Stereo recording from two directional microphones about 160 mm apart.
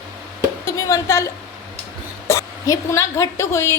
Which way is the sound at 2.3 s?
20° left (ahead or behind).